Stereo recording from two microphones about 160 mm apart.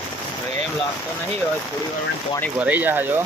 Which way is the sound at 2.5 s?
10° right (ahead or behind).